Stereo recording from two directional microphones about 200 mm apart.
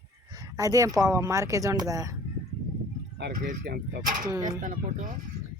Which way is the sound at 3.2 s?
55° right (ahead or behind).